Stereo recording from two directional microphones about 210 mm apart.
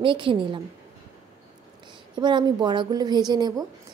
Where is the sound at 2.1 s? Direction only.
20° right (ahead or behind).